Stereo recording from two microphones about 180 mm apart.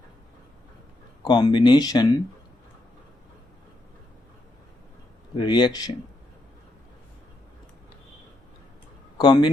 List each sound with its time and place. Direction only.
1.2 s speech: 25° left (ahead or behind)
5.4 s speech: 25° left (ahead or behind)
9.1 s speech: 25° left (ahead or behind)